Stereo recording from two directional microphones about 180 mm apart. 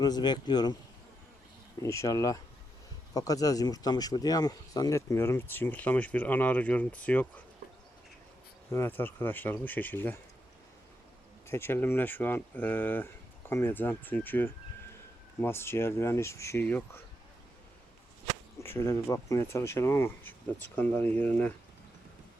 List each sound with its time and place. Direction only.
0.0 s speech: 25° left (ahead or behind)
1.8 s speech: 15° left (ahead or behind)
8.7 s speech: 10° left (ahead or behind)
11.4 s speech: 15° left (ahead or behind)
18.6 s speech: 15° left (ahead or behind)